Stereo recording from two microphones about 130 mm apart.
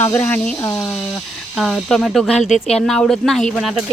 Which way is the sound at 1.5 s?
Centre (ahead or behind).